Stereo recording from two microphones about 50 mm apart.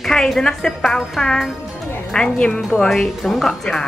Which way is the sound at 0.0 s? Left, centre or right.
Centre.